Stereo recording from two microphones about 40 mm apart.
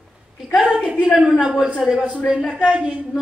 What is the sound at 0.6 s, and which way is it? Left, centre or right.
Speech, right.